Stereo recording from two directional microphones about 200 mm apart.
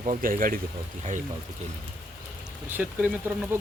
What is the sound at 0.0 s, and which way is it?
Speech, 40° right (ahead or behind).